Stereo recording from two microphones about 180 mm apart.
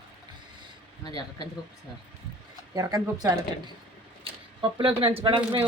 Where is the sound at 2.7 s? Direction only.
20° right (ahead or behind).